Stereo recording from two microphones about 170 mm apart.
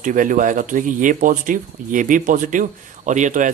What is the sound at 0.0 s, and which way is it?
Speech, 50° right (ahead or behind).